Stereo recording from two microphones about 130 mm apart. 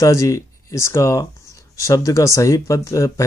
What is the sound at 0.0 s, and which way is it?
Speech, 25° left (ahead or behind).